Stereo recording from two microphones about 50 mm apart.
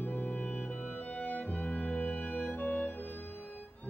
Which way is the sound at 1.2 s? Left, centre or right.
Left.